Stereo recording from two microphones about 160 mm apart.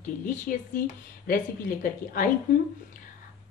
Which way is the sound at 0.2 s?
55° left (ahead or behind).